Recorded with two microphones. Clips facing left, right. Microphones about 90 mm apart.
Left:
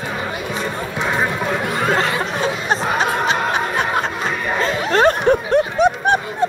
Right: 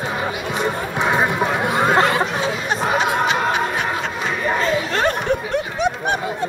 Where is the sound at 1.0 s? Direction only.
20° right (ahead or behind).